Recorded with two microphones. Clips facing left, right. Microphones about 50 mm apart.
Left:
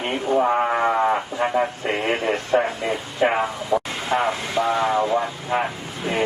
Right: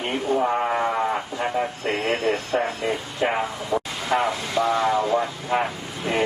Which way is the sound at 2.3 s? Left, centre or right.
Centre.